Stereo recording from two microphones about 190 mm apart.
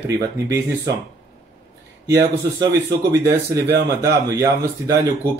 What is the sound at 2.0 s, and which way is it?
Speech, 15° right (ahead or behind).